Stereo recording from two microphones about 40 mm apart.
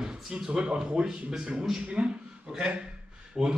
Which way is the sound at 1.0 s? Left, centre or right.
Centre.